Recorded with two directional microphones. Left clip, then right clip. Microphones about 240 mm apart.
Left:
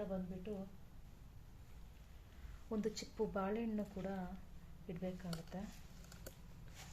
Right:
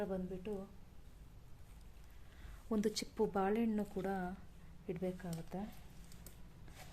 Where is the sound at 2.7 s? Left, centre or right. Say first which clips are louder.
Right 4 dB; right.